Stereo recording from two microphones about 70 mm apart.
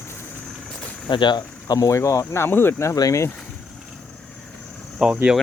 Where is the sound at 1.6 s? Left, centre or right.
Left.